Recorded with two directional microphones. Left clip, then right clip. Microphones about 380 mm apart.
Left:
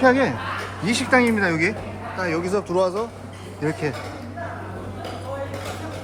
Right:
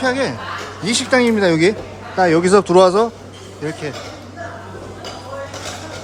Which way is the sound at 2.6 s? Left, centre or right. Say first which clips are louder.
Right 10 dB; right.